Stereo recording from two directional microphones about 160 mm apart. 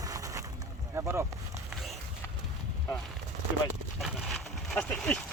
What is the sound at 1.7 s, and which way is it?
Run, centre (ahead or behind).